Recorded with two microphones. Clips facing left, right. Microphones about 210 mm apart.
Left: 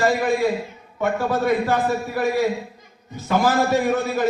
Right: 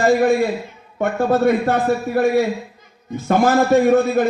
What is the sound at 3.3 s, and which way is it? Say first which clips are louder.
Speech: right 4 dB; 50° right (ahead or behind).